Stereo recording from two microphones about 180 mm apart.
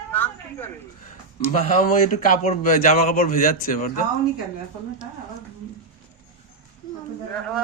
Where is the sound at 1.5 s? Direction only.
45° left (ahead or behind).